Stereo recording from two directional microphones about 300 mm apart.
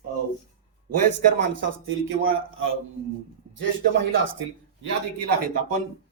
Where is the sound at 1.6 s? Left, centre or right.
Right.